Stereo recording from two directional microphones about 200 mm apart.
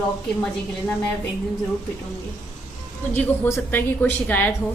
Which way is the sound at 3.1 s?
10° left (ahead or behind).